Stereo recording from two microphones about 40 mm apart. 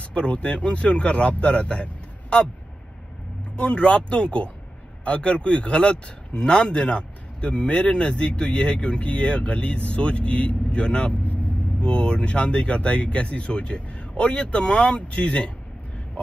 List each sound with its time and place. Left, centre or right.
0.0 s speech: left
3.5 s speech: left